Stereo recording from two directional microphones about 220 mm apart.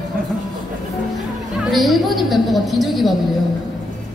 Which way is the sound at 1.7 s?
Centre (ahead or behind).